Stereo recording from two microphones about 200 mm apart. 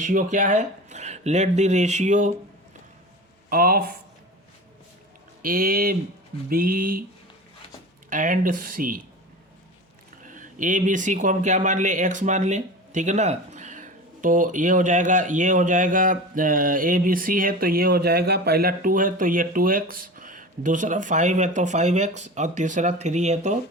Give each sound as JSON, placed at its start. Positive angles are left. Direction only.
{"t": 0.0, "sound": "speech", "side_deg": -40}
{"t": 3.5, "sound": "speech", "side_deg": -45}
{"t": 5.4, "sound": "speech", "side_deg": -45}
{"t": 8.1, "sound": "speech", "side_deg": -40}
{"t": 10.2, "sound": "speech", "side_deg": -40}